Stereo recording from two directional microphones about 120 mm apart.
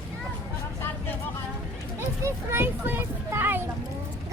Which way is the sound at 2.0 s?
20° right (ahead or behind).